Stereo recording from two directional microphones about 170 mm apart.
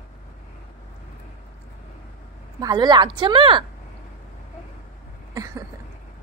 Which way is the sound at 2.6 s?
25° right (ahead or behind).